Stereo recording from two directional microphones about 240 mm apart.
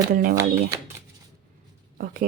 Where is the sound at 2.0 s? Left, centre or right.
Right.